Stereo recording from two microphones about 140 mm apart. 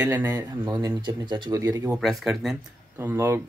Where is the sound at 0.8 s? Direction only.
35° right (ahead or behind).